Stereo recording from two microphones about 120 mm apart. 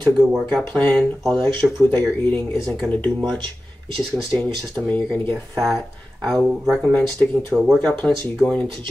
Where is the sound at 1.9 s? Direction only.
15° left (ahead or behind).